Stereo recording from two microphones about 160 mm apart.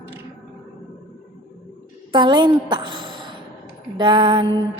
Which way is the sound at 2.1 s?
30° right (ahead or behind).